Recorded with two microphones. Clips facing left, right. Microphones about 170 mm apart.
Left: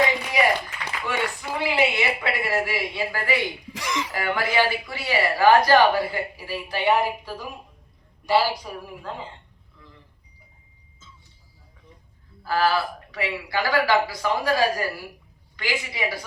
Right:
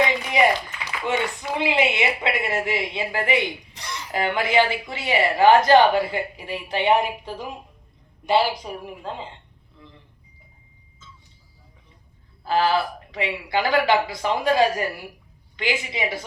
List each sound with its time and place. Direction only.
1.0 s speech: 20° right (ahead or behind)
3.7 s speech: 90° left
4.1 s speech: 20° right (ahead or behind)
12.4 s speech: 20° right (ahead or behind)